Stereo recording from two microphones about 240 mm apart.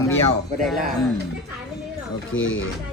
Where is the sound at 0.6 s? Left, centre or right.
Centre.